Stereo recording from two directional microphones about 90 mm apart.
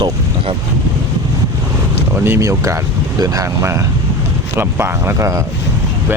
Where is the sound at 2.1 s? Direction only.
25° right (ahead or behind).